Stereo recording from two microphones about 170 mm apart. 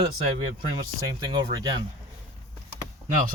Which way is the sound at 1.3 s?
25° right (ahead or behind).